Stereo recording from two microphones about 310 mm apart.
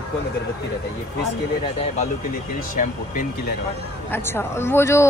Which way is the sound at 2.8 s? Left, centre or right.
Left.